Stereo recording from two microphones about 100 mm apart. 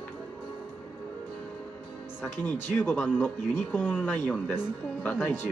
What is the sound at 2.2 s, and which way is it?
Speech, 20° left (ahead or behind).